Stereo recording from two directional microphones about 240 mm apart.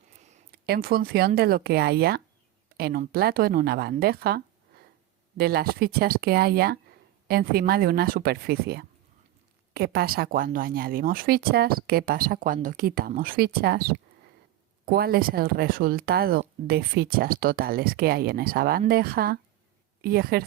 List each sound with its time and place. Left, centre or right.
0.5 s speech: right